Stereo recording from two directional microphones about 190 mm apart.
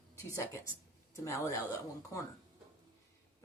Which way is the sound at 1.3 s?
15° left (ahead or behind).